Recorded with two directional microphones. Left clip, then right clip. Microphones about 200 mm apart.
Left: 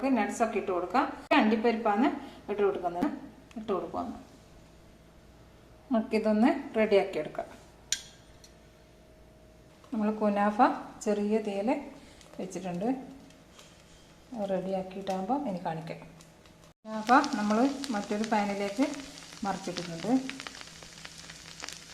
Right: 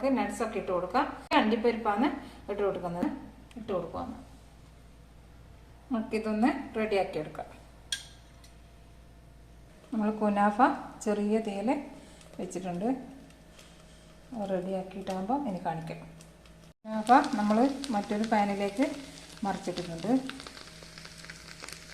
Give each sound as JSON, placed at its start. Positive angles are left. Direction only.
{"t": 0.0, "sound": "a woman's voice", "side_deg": 15}
{"t": 5.9, "sound": "a woman's voice", "side_deg": 25}
{"t": 9.9, "sound": "a woman's voice", "side_deg": 0}
{"t": 14.3, "sound": "a woman's voice", "side_deg": 0}
{"t": 21.6, "sound": "a sound", "side_deg": 0}